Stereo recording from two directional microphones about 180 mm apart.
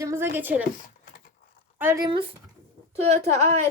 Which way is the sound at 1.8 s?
15° right (ahead or behind).